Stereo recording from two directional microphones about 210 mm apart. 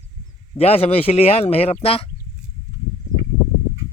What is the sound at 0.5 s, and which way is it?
Speech, 30° left (ahead or behind).